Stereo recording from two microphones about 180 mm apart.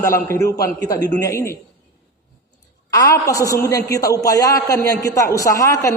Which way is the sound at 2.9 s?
20° left (ahead or behind).